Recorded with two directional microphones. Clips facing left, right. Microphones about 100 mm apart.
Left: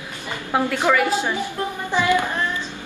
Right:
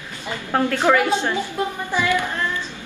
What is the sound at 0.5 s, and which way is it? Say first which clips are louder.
Speech: right 1 dB; 15° left (ahead or behind).